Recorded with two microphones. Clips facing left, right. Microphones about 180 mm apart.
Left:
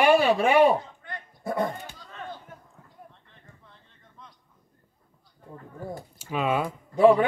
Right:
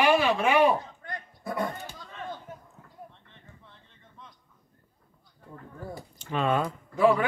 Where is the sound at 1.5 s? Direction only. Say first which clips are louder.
Left 3 dB; 30° left (ahead or behind).